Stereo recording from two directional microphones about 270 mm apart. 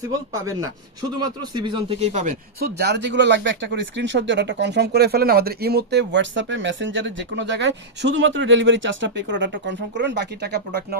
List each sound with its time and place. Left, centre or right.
0.3 s speech: centre; by 10.8 s right